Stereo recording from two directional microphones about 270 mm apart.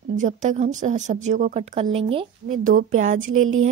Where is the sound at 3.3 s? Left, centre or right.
Right.